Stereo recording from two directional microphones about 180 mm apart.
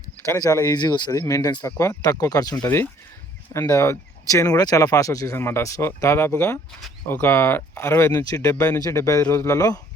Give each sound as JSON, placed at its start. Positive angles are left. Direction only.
{"t": 0.3, "sound": "speech", "side_deg": 15}